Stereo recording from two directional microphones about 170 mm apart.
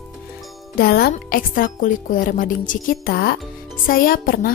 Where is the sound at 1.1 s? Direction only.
55° left (ahead or behind).